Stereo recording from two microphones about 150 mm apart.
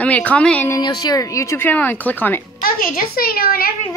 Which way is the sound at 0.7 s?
25° left (ahead or behind).